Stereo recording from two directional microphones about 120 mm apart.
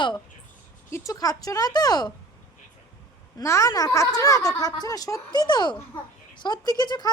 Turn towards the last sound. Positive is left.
turn(degrees=35)  # may be behind; listen again after turning